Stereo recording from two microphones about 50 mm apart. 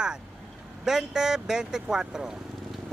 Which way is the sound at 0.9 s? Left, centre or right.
Centre.